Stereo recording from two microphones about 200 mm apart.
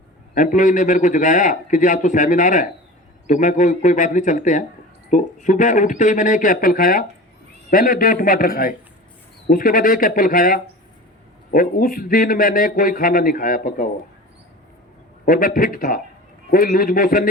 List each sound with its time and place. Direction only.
0.3 s a man's voice: 40° left (ahead or behind)
15.2 s a man's voice: 45° left (ahead or behind)